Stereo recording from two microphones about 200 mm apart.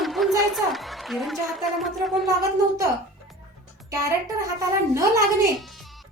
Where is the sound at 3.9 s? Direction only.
15° right (ahead or behind).